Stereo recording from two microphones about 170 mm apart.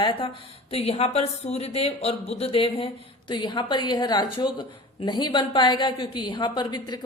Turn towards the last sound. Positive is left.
turn(degrees=25)  # may be behind; listen again after turning